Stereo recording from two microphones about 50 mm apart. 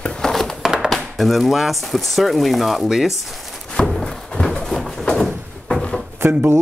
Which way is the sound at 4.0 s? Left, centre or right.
Centre.